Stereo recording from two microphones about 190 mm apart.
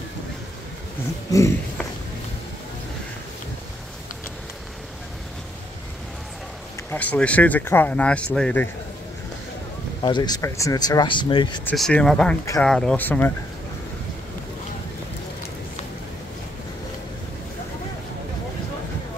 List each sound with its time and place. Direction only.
6.9 s speech: 10° left (ahead or behind)
10.0 s speech: 20° left (ahead or behind)
11.6 s speech: 5° left (ahead or behind)